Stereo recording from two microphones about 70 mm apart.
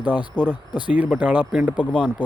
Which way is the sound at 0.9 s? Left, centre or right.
Right.